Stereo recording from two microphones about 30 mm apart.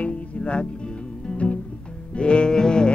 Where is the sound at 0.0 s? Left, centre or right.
Left.